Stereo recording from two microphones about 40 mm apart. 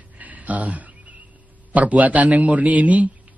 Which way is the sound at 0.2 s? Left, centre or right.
Right.